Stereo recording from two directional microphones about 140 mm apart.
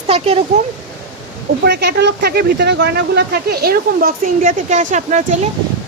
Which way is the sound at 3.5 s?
90° right.